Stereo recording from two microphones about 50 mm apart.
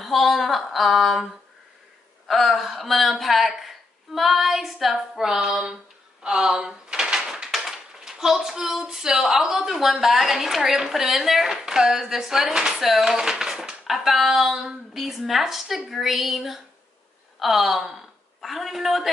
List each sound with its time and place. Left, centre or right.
0.0 s a woman's voice: centre
6.2 s door: centre
7.5 s a sound: centre
9.3 s a woman's voice: centre